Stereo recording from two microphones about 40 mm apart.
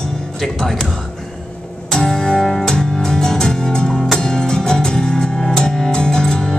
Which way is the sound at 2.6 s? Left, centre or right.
Centre.